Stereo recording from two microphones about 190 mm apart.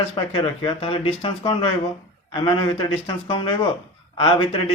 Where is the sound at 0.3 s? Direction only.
30° left (ahead or behind).